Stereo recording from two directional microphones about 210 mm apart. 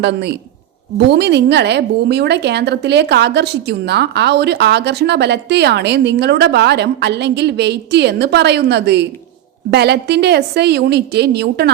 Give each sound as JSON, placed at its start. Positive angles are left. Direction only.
{"t": 0.0, "sound": "a woman's voice", "side_deg": -55}